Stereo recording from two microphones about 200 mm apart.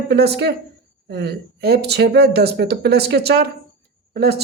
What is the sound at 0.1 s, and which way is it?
Speech, 55° right (ahead or behind).